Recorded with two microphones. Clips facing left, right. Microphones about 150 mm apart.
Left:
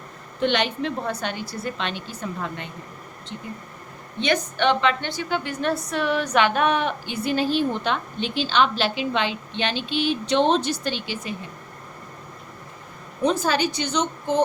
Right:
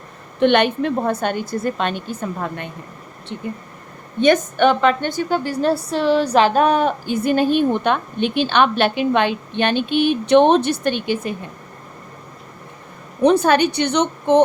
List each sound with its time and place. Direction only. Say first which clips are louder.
0.3 s a woman's voice: right 8 dB; 55° right (ahead or behind)
4.2 s a woman's voice: right 8 dB; 50° right (ahead or behind)
13.2 s a woman's voice: right 7 dB; 65° right (ahead or behind)